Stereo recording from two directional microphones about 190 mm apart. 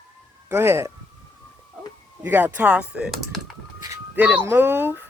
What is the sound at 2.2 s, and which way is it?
Speech, 10° right (ahead or behind).